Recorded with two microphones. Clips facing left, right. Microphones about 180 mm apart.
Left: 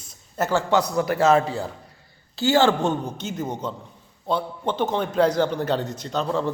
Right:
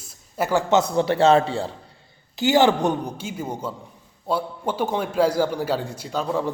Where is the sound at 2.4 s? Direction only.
15° right (ahead or behind).